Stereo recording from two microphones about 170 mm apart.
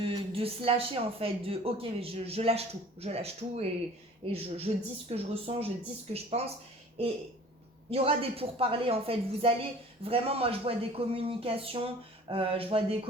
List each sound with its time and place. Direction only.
0.0 s a woman's voice: 35° right (ahead or behind)
7.9 s a woman's voice: 35° right (ahead or behind)